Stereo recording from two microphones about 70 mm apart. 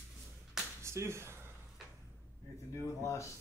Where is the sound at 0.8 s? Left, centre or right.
Right.